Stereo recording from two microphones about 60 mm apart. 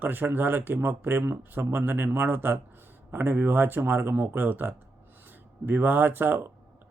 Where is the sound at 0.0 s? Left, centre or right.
Right.